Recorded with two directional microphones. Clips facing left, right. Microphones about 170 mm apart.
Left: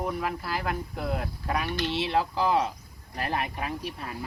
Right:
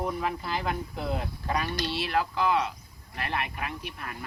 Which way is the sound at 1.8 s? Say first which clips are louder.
Left 2 dB; 25° left (ahead or behind).